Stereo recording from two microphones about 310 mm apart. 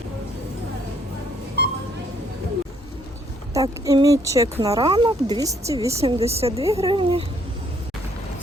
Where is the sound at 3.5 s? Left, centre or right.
Centre.